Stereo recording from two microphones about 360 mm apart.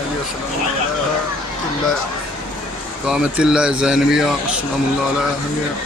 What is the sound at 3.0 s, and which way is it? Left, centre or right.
Speech, centre.